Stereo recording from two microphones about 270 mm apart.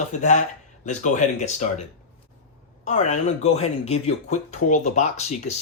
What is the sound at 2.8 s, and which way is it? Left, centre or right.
Speech, left.